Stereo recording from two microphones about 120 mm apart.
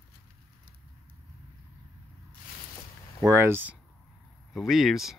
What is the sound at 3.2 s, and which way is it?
Speech, 20° right (ahead or behind).